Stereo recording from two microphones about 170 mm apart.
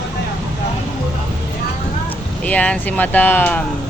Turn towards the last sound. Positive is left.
turn(degrees=10)  # may be behind; listen again after turning